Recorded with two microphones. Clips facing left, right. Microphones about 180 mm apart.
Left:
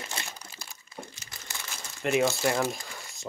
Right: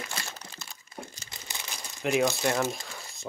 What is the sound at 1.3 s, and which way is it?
Crumpling, 20° right (ahead or behind).